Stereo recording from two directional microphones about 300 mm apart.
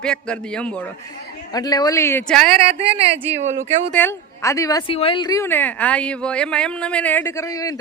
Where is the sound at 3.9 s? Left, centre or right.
Centre.